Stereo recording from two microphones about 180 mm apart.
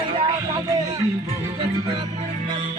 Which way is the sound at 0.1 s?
20° right (ahead or behind).